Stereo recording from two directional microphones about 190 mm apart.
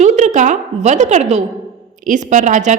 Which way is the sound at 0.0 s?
40° right (ahead or behind).